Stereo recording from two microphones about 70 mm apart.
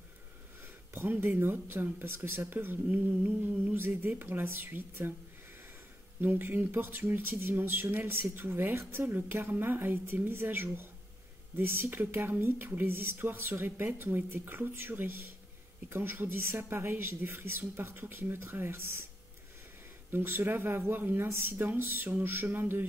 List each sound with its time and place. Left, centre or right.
0.9 s speech: right
6.2 s speech: right
20.1 s speech: right